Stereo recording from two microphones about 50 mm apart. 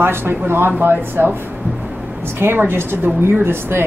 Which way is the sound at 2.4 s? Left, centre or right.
Right.